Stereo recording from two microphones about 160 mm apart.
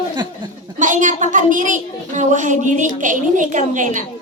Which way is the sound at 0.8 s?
55° right (ahead or behind).